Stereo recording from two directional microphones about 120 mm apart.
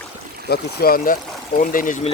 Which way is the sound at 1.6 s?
90° left.